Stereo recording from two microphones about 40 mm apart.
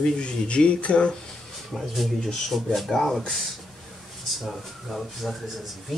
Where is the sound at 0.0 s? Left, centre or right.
Left.